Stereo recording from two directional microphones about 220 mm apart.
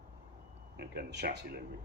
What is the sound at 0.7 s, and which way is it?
Speech, 50° right (ahead or behind).